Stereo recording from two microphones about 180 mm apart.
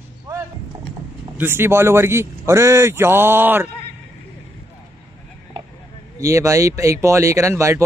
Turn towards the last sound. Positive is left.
turn(degrees=-15)  # may be behind; listen again after turning